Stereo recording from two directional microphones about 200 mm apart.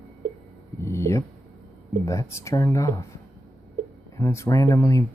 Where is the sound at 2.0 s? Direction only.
15° left (ahead or behind).